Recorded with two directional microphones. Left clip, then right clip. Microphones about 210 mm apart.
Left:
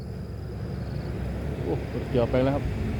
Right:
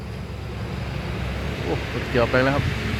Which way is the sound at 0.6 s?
40° left (ahead or behind).